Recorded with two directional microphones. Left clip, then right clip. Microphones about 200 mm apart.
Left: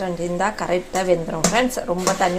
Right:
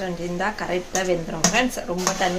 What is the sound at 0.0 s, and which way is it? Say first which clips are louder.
A woman's voice: left 4 dB; 10° left (ahead or behind).